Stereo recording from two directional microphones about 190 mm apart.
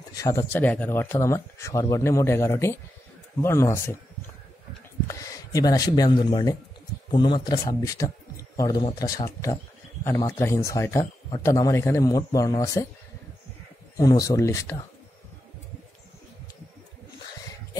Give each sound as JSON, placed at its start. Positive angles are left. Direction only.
{"t": 0.1, "sound": "speech", "side_deg": 15}
{"t": 5.0, "sound": "speech", "side_deg": 15}
{"t": 13.9, "sound": "speech", "side_deg": 20}